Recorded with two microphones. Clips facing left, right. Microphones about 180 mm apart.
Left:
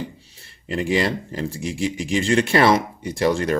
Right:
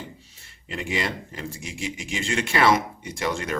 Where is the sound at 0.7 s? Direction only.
35° left (ahead or behind).